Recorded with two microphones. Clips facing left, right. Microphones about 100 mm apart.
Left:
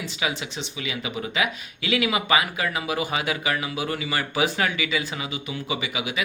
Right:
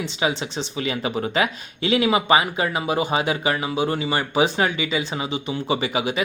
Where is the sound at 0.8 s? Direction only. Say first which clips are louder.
Right 6 dB; 40° right (ahead or behind).